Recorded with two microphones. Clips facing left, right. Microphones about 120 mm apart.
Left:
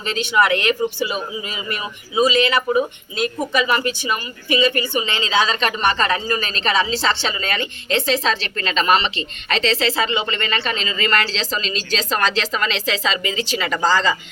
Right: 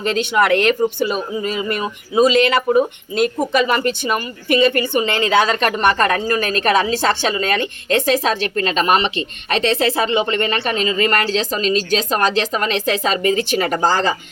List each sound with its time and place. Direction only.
0.0 s a man's voice: 45° right (ahead or behind)